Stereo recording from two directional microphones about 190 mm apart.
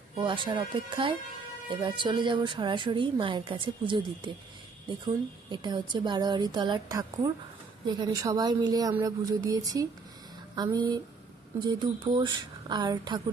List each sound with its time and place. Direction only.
0.1 s a woman's voice: 25° right (ahead or behind)